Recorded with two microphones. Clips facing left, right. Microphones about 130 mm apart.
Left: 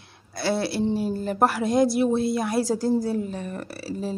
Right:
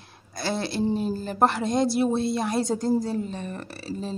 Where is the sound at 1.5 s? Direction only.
5° left (ahead or behind).